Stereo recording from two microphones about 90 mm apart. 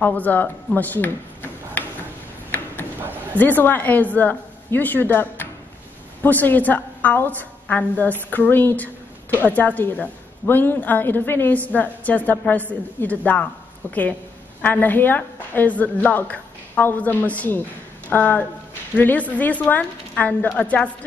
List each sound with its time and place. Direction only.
0.0 s a woman's voice: 20° left (ahead or behind)
0.7 s a sound: 20° left (ahead or behind)
3.3 s a woman's voice: 20° left (ahead or behind)